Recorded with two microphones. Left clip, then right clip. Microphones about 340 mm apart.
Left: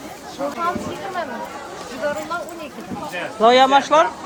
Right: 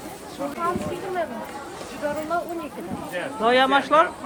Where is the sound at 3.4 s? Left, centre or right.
Centre.